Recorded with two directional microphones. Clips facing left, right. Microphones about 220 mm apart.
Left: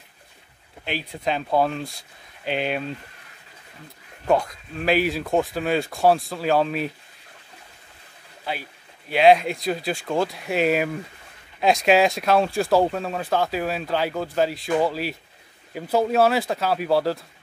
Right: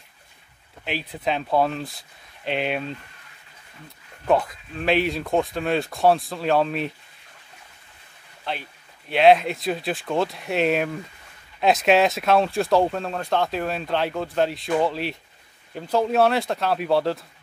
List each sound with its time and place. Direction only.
0.8 s speech: centre (ahead or behind)
4.3 s speech: centre (ahead or behind)
8.5 s a man's voice: 5° left (ahead or behind)